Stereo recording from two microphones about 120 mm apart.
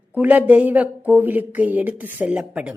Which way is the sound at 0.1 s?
15° right (ahead or behind).